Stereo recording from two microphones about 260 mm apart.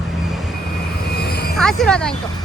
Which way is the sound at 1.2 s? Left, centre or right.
Left.